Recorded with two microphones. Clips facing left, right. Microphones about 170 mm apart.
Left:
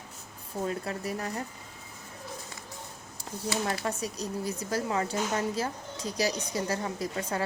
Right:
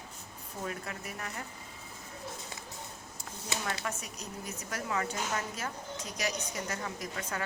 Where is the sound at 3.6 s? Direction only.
35° left (ahead or behind).